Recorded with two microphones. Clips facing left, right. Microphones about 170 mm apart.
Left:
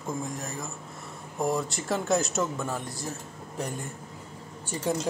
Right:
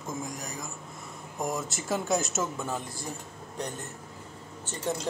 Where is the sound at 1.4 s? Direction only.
Centre (ahead or behind).